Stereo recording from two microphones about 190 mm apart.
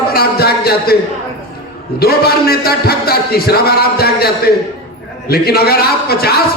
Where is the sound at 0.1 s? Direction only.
55° left (ahead or behind).